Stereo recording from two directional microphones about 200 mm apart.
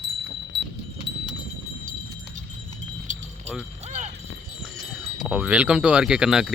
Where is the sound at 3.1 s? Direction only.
40° right (ahead or behind).